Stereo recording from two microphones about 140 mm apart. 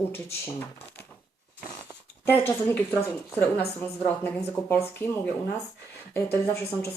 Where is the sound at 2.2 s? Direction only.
15° left (ahead or behind).